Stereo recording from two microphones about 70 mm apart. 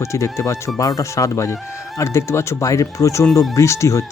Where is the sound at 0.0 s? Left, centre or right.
Left.